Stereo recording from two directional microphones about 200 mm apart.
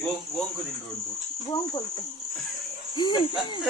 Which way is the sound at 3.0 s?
25° left (ahead or behind).